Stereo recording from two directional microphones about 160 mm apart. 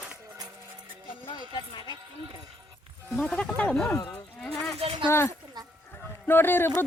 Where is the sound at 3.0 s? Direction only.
5° left (ahead or behind).